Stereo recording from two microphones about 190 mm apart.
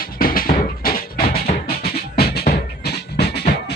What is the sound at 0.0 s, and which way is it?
Music, 50° left (ahead or behind).